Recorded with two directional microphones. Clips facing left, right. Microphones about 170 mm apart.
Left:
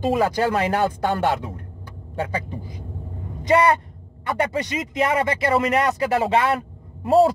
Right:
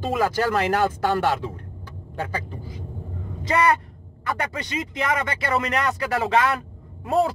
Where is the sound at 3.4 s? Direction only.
25° left (ahead or behind).